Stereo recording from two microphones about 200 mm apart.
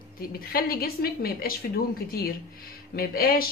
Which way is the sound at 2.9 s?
50° left (ahead or behind).